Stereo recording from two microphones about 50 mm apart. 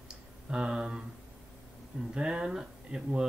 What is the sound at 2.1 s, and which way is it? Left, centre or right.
Speech, centre.